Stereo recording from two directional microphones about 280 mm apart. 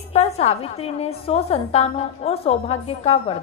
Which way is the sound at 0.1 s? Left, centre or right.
Left.